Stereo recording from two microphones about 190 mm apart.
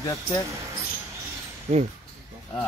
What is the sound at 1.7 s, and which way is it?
Speech, 35° right (ahead or behind).